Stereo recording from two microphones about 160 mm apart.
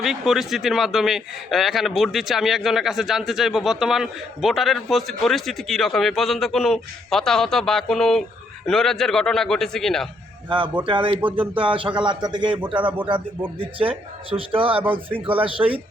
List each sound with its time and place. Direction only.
0.0 s a man's voice: centre (ahead or behind)
10.8 s speech: 35° right (ahead or behind)
13.6 s speech: 35° right (ahead or behind)